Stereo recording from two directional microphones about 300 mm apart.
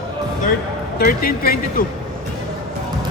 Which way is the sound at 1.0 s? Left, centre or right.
Left.